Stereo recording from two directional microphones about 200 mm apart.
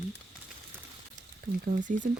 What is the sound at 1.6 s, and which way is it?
Speech, 40° right (ahead or behind).